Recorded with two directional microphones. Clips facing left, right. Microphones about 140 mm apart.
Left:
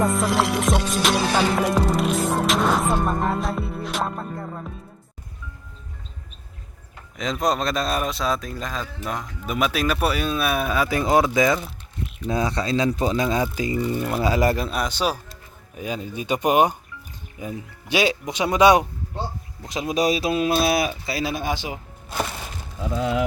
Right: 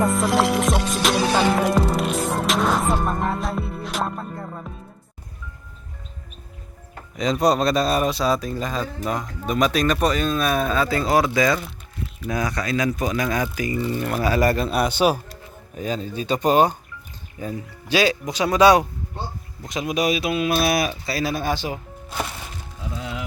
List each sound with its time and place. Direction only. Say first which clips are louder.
0.0 s music: right 1 dB; centre (ahead or behind)
7.2 s music: right 4 dB; centre (ahead or behind)
9.0 s speech: right 2 dB; centre (ahead or behind)
15.0 s speech: right 5 dB; 10° right (ahead or behind)
15.8 s speech: right 2 dB; 10° left (ahead or behind); by 20.6 s 35° left (ahead or behind)
20.6 s speech: even; 25° left (ahead or behind)
22.9 s speech: left 8 dB; 50° left (ahead or behind)